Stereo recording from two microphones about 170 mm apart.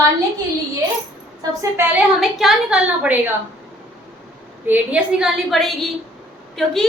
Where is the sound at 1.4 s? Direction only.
20° right (ahead or behind).